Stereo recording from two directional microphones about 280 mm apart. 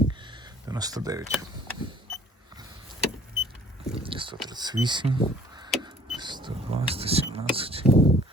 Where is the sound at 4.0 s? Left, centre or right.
Centre.